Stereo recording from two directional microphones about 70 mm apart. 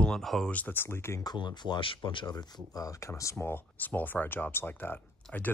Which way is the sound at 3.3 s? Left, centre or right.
Left.